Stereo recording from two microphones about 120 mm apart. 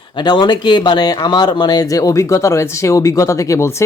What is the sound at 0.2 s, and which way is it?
Speech, 35° left (ahead or behind).